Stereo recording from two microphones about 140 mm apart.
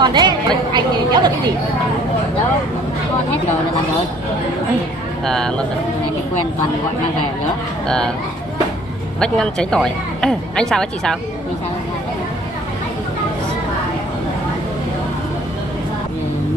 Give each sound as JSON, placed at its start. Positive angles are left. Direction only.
{"t": 0.0, "sound": "a sound", "side_deg": -30}
{"t": 5.2, "sound": "speech", "side_deg": 5}
{"t": 9.2, "sound": "speech", "side_deg": 5}